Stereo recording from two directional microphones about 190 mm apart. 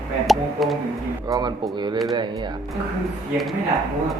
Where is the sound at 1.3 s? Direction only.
20° right (ahead or behind).